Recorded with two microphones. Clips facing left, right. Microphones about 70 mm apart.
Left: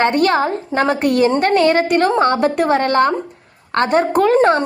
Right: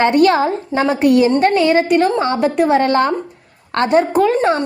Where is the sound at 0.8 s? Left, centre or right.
Left.